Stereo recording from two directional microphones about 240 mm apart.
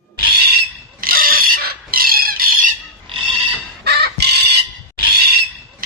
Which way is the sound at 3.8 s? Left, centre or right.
Right.